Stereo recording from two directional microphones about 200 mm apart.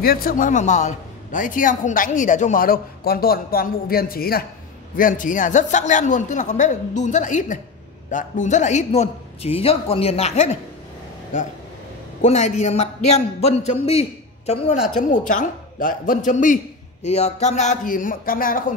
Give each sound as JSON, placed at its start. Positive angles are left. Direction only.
{"t": 0.0, "sound": "a man's voice", "side_deg": 50}
{"t": 12.2, "sound": "speech", "side_deg": 35}